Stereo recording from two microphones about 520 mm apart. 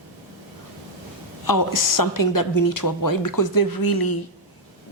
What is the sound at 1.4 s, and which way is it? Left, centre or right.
A woman's voice, left.